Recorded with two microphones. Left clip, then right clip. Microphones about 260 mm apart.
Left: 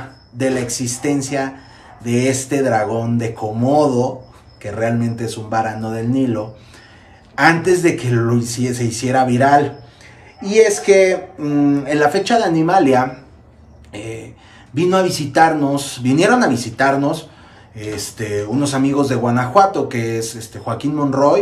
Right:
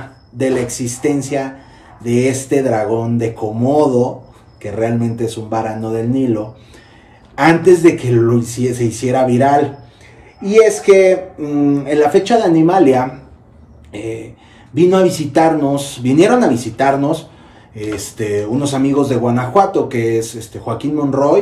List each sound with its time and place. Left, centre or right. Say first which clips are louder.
0.4 s speech: right 3 dB; centre
7.3 s speech: right 3 dB; centre
21.0 s speech: even; left